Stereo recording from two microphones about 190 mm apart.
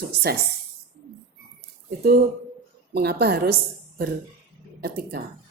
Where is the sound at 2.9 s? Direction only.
60° right (ahead or behind).